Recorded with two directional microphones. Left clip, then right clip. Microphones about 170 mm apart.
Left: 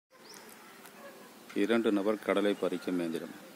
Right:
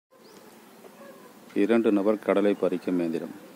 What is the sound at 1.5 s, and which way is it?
Speech, centre (ahead or behind).